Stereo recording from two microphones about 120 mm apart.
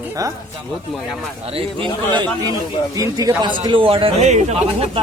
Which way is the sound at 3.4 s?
40° right (ahead or behind).